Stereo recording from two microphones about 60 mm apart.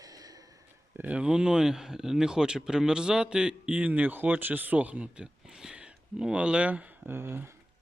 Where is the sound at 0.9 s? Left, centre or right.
Right.